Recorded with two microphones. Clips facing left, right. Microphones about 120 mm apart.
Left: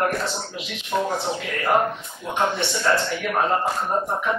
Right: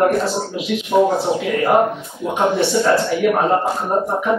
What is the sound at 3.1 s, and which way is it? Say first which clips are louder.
Speech: right 10 dB; 5° right (ahead or behind).